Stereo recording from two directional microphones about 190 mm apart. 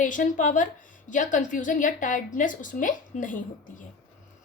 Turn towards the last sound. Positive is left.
turn(degrees=45)  # may be behind; listen again after turning